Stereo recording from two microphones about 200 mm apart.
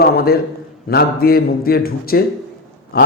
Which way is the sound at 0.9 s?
50° left (ahead or behind).